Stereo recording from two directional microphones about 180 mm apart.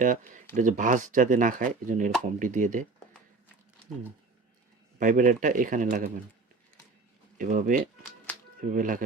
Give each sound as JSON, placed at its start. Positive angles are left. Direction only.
{"t": 0.0, "sound": "speech", "side_deg": -45}
{"t": 4.9, "sound": "speech", "side_deg": -45}
{"t": 7.3, "sound": "speech", "side_deg": -45}
{"t": 8.3, "sound": "a sound", "side_deg": 10}
{"t": 8.7, "sound": "speech", "side_deg": -45}